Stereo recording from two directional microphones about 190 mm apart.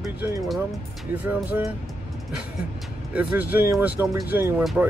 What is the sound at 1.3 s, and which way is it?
Speech, 10° right (ahead or behind).